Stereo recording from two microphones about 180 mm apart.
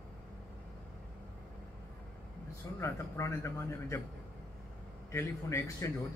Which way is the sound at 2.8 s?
15° left (ahead or behind).